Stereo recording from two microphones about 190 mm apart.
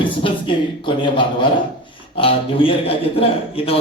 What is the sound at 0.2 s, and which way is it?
A man's voice, 25° left (ahead or behind).